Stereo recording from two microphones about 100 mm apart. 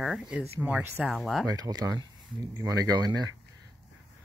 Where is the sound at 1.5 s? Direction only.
40° right (ahead or behind).